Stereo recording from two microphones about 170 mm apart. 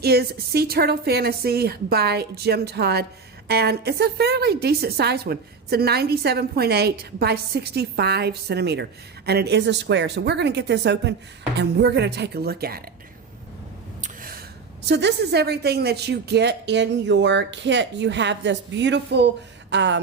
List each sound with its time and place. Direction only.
0.0 s a woman's voice: 70° right (ahead or behind)
14.0 s a sound: 55° right (ahead or behind)
14.8 s a woman's voice: 80° right